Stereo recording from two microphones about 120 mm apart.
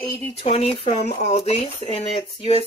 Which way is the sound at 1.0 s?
75° left (ahead or behind).